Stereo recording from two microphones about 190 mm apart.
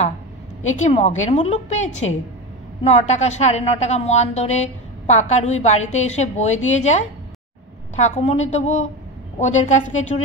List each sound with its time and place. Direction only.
0.7 s speech: 35° left (ahead or behind)